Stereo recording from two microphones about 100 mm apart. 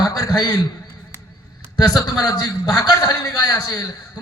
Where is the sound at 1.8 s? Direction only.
40° left (ahead or behind).